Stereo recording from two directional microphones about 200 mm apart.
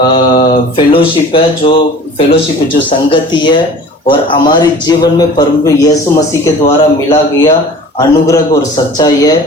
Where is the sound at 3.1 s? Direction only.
25° left (ahead or behind).